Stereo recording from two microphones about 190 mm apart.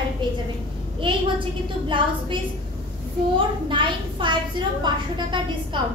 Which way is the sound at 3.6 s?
25° right (ahead or behind).